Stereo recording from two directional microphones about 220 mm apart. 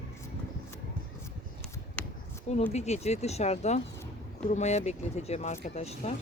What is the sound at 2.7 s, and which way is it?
Speech, 30° left (ahead or behind).